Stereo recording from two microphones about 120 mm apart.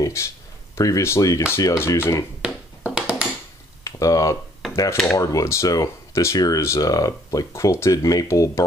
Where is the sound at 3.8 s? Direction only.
25° left (ahead or behind).